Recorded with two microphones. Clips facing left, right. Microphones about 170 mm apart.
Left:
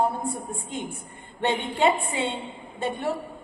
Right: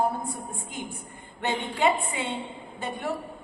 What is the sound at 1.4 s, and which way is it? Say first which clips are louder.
Speech: left 3 dB; 30° left (ahead or behind).